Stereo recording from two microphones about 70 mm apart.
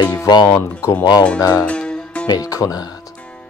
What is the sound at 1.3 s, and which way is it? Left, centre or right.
Speech, left.